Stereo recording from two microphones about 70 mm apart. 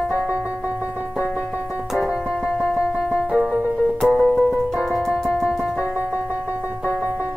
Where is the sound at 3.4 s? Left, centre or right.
Centre.